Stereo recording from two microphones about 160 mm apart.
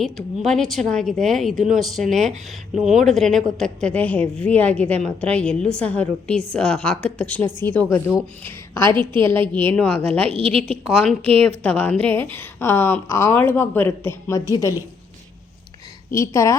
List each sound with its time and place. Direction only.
0.0 s a woman's voice: centre (ahead or behind)
10.2 s a woman's voice: 35° right (ahead or behind)
10.8 s a woman's voice: 5° left (ahead or behind); by 14.8 s 20° left (ahead or behind)
16.1 s a woman's voice: 20° left (ahead or behind)